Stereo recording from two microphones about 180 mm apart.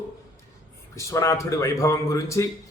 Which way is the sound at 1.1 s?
15° left (ahead or behind).